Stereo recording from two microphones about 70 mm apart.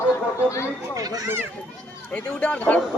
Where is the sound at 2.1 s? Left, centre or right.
Centre.